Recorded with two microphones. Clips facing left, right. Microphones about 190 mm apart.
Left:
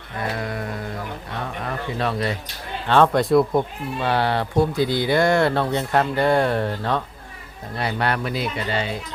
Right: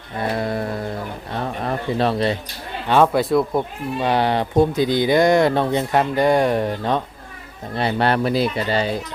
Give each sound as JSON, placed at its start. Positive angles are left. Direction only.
{"t": 0.2, "sound": "music", "side_deg": -30}
{"t": 1.6, "sound": "speech", "side_deg": -30}
{"t": 2.8, "sound": "speech", "side_deg": -15}
{"t": 4.0, "sound": "speech", "side_deg": -15}
{"t": 7.8, "sound": "speech", "side_deg": -30}